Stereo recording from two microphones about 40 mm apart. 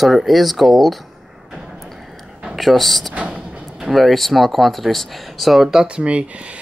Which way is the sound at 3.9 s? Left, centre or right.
Centre.